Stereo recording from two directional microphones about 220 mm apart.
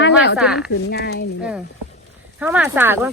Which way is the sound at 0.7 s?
50° left (ahead or behind).